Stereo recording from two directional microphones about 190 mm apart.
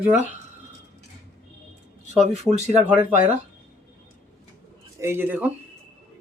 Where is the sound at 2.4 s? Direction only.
35° right (ahead or behind).